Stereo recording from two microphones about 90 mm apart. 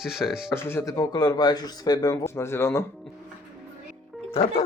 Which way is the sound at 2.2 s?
30° left (ahead or behind).